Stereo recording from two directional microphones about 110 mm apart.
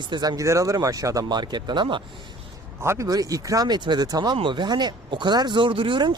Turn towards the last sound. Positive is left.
turn(degrees=-45)  # may be behind; listen again after turning